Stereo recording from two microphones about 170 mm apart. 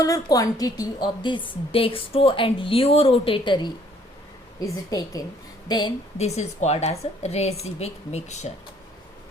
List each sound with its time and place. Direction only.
0.0 s a woman's voice: 20° left (ahead or behind)
6.1 s speech: 40° left (ahead or behind)